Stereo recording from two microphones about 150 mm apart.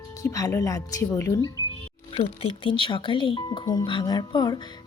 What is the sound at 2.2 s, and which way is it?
Speech, 40° left (ahead or behind).